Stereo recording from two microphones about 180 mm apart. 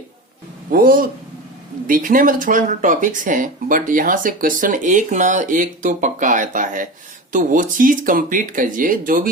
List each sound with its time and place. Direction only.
0.7 s speech: 50° right (ahead or behind)